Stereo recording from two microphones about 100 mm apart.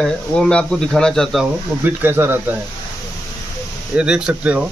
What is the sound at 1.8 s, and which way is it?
Speech, 20° right (ahead or behind).